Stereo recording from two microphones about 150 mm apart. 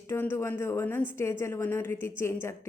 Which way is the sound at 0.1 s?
15° left (ahead or behind).